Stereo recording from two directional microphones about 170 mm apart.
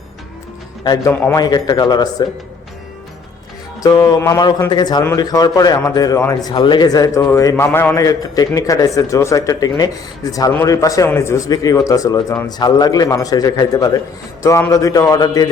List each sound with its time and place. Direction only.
1.1 s a man's voice: 10° left (ahead or behind)
1.4 s a man's voice: 25° left (ahead or behind)
3.8 s a man's voice: 25° left (ahead or behind)